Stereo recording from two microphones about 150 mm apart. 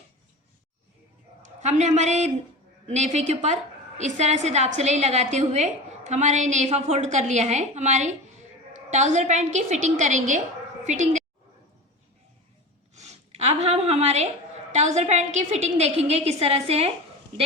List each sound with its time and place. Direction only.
1.6 s a woman's voice: 50° right (ahead or behind)
12.9 s a woman's voice: 50° right (ahead or behind)